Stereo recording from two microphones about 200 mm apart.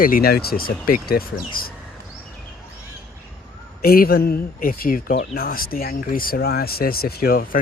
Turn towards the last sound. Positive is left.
turn(degrees=45)  # may be behind; listen again after turning